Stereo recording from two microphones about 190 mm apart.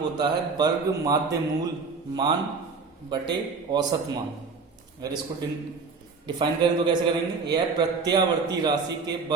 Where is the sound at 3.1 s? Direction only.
25° right (ahead or behind).